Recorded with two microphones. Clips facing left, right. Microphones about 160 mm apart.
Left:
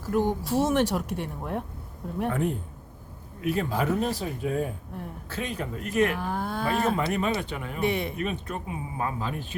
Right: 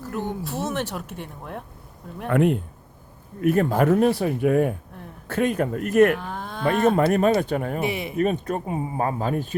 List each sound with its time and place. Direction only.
0.0 s speech: 10° left (ahead or behind)
2.3 s speech: 75° right (ahead or behind)
3.4 s speech: 55° right (ahead or behind)
5.3 s speech: 55° right (ahead or behind)
6.1 s a sound: 10° left (ahead or behind)
6.9 s speech: 50° right (ahead or behind)
7.9 s speech: 5° right (ahead or behind)
8.2 s speech: 45° right (ahead or behind)